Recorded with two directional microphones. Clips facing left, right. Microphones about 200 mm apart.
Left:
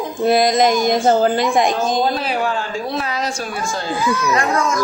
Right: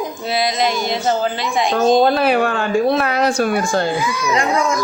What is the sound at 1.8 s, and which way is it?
Speech, 60° right (ahead or behind).